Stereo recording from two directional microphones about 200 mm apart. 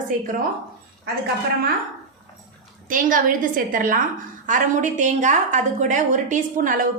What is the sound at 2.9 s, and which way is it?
A woman's voice, 45° right (ahead or behind).